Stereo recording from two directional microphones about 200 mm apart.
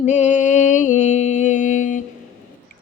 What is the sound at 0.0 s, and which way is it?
Music, 35° left (ahead or behind).